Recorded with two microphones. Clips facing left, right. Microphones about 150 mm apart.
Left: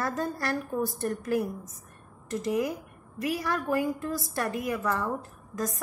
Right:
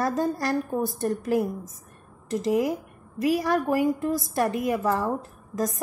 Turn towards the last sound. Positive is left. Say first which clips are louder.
# right 5 dB
turn(degrees=-25)  # may be behind; listen again after turning